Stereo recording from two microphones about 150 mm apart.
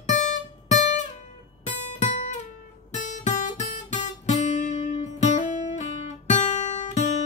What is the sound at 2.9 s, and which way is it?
Guitar, 55° left (ahead or behind).